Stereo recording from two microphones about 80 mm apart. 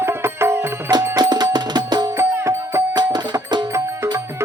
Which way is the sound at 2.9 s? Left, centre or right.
Right.